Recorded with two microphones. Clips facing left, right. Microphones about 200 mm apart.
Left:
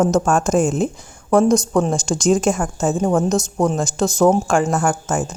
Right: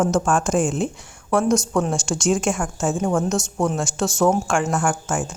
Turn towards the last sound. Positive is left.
turn(degrees=40)  # may be behind; listen again after turning